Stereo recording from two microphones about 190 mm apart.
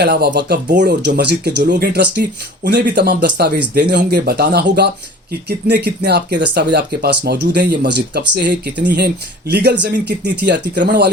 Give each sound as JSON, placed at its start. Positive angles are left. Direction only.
{"t": 0.0, "sound": "speech", "side_deg": -60}